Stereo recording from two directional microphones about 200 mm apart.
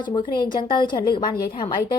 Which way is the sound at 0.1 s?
25° left (ahead or behind).